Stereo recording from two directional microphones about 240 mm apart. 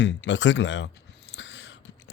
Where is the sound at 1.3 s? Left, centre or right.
Left.